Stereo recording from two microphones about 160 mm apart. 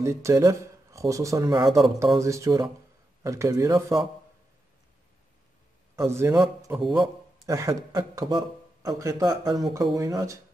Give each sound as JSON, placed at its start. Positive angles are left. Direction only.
{"t": 0.0, "sound": "speech", "side_deg": -20}
{"t": 5.9, "sound": "a man's voice", "side_deg": -15}